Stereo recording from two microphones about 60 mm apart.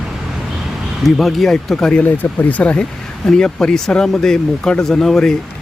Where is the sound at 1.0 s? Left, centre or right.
Centre.